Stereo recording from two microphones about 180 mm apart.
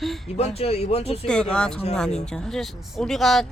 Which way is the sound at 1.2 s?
5° left (ahead or behind).